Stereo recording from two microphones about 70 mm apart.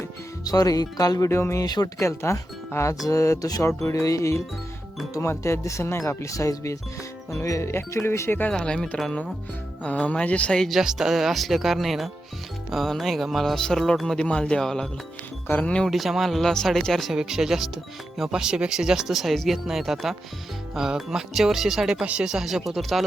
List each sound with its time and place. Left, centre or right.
0.4 s speech: left
1.3 s speech: left
1.6 s speech: left
2.0 s speech: left
8.4 s a man's voice: centre
10.6 s a man's voice: centre
15.4 s speech: left
15.9 s speech: centre